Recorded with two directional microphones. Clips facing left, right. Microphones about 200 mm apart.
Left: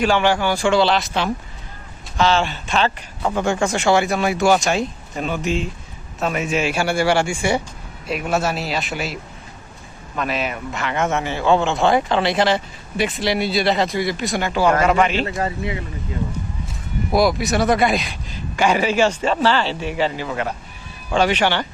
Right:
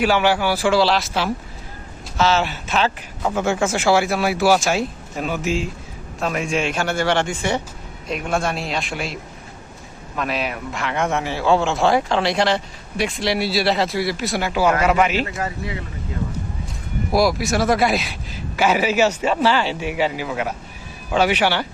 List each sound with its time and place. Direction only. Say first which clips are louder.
0.0 s a man's voice: even; 10° right (ahead or behind)
10.2 s speech: left 1 dB; centre (ahead or behind)
15.4 s speech: left 3 dB; 25° left (ahead or behind)
17.1 s speech: left 1 dB; centre (ahead or behind)